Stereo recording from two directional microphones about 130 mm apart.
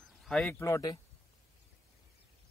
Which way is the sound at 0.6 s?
25° left (ahead or behind).